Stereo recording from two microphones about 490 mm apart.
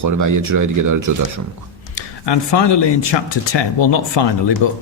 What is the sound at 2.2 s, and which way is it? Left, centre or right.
Speech, left.